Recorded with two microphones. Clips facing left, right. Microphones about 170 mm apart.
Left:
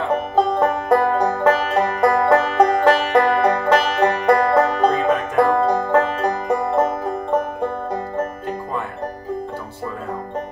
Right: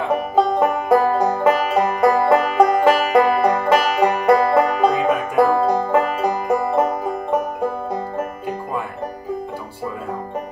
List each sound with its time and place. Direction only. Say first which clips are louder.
0.1 s music: right 1 dB; 10° right (ahead or behind)